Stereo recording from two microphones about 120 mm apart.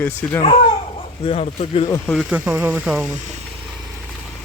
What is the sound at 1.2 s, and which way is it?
Speech, 55° left (ahead or behind).